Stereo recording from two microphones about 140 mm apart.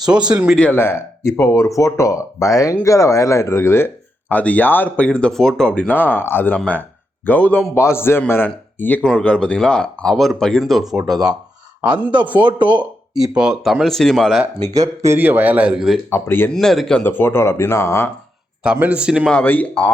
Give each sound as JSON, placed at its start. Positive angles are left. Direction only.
{"t": 0.0, "sound": "speech", "side_deg": -5}
{"t": 0.5, "sound": "a man's voice", "side_deg": 10}
{"t": 12.2, "sound": "a man's voice", "side_deg": -10}
{"t": 14.7, "sound": "speech", "side_deg": -25}
{"t": 16.0, "sound": "speech", "side_deg": 15}
{"t": 16.5, "sound": "a man's voice", "side_deg": 5}
{"t": 17.0, "sound": "speech", "side_deg": 15}
{"t": 18.6, "sound": "speech", "side_deg": -10}
{"t": 19.3, "sound": "speech", "side_deg": 10}